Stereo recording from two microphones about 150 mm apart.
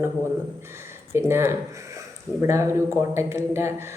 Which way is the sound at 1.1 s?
15° right (ahead or behind).